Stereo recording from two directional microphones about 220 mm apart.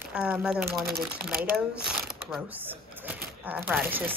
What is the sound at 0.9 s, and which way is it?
Speech, 45° right (ahead or behind).